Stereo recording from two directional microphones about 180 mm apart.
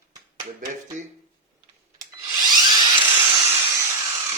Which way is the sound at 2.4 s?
25° right (ahead or behind).